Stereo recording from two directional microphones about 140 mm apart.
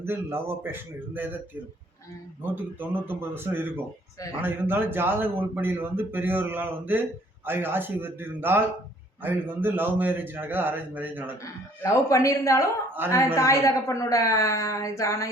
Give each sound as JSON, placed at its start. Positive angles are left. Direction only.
{"t": 0.0, "sound": "a man's voice", "side_deg": -15}
{"t": 2.4, "sound": "a man's voice", "side_deg": -15}
{"t": 11.8, "sound": "a woman's voice", "side_deg": 20}